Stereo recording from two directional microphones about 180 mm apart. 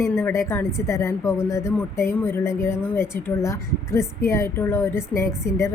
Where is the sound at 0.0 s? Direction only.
15° left (ahead or behind).